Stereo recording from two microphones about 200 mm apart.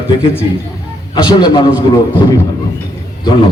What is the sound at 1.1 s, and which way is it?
Speech, 20° left (ahead or behind).